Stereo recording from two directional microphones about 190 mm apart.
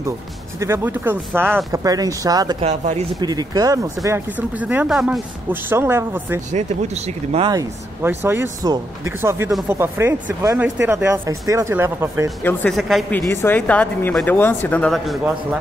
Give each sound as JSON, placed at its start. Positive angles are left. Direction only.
{"t": 0.6, "sound": "speech", "side_deg": -10}
{"t": 2.6, "sound": "speech", "side_deg": -40}
{"t": 3.2, "sound": "speech", "side_deg": -20}
{"t": 6.5, "sound": "speech", "side_deg": -35}
{"t": 7.4, "sound": "speech", "side_deg": -15}
{"t": 12.4, "sound": "speech", "side_deg": 5}
{"t": 13.3, "sound": "speech", "side_deg": 10}